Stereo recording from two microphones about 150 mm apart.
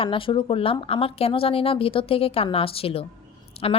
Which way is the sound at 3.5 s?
40° left (ahead or behind).